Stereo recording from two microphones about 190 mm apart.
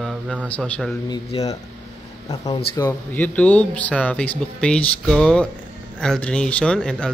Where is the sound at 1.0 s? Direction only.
20° left (ahead or behind).